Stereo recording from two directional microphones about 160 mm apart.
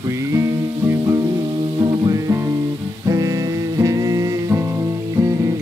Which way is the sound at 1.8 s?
25° right (ahead or behind).